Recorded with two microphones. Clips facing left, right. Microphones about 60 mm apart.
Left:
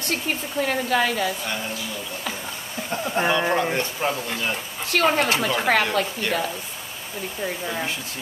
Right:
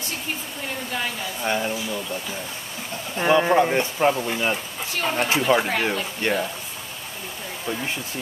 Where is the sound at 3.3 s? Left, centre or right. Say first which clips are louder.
Right 6 dB; centre.